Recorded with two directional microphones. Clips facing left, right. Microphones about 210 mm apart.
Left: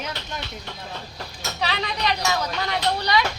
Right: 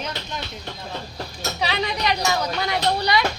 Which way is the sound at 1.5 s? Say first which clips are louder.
Right 2 dB; 10° right (ahead or behind).